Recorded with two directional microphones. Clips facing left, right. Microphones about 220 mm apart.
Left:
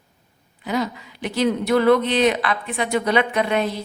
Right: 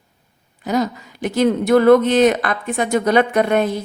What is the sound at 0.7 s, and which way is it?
Speech, 45° right (ahead or behind).